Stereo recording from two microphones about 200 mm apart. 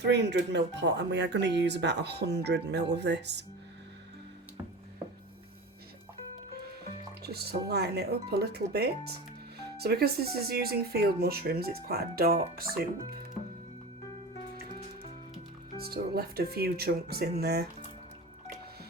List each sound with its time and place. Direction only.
0.0 s speech: 60° right (ahead or behind)
7.2 s speech: 55° right (ahead or behind)
15.8 s speech: 50° right (ahead or behind)